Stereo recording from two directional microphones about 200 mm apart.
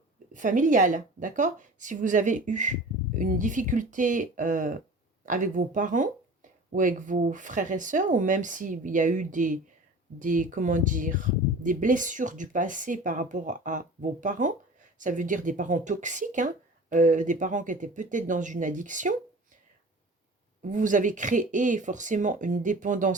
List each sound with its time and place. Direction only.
0.3 s speech: 40° right (ahead or behind)
20.6 s speech: 40° right (ahead or behind)